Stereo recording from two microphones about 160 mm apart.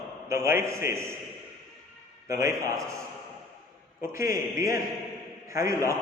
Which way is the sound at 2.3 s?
20° right (ahead or behind).